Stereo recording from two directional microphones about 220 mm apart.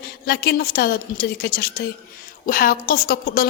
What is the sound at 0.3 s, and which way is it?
A woman's voice, 45° left (ahead or behind).